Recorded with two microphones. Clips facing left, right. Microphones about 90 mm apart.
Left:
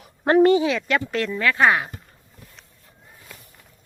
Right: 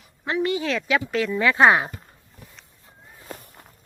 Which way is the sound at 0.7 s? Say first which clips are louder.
Even; centre (ahead or behind).